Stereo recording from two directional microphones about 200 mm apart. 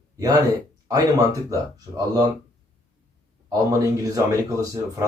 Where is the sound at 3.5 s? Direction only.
15° right (ahead or behind).